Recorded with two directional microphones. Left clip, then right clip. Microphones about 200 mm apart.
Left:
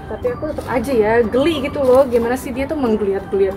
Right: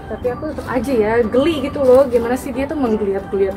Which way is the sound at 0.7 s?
15° left (ahead or behind).